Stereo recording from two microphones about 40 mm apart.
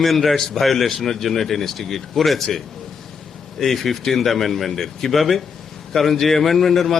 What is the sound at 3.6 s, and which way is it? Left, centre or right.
A man's voice, centre.